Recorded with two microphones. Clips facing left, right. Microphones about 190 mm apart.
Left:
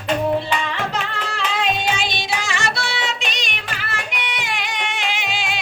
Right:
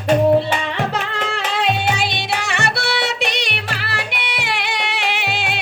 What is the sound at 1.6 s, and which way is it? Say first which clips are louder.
Music: right 3 dB; 65° right (ahead or behind).